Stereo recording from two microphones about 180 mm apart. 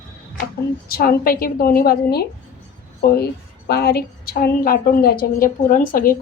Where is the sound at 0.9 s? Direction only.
55° left (ahead or behind).